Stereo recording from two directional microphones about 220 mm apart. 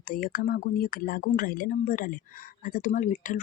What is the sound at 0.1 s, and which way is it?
Speech, 40° left (ahead or behind).